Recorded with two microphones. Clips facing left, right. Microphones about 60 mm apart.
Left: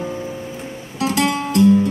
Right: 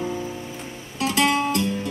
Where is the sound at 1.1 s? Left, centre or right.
Right.